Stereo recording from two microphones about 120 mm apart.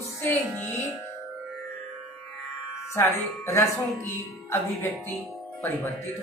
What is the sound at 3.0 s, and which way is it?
Music, 20° left (ahead or behind).